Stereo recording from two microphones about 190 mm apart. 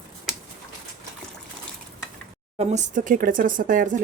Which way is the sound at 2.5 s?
35° right (ahead or behind).